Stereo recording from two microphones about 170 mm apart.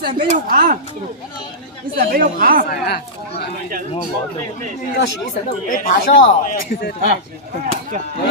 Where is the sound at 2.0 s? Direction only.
55° right (ahead or behind).